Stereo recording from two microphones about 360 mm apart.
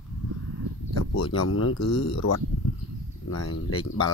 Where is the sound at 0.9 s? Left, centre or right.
Left.